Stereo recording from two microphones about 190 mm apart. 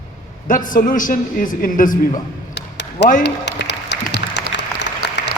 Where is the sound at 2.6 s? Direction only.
65° left (ahead or behind).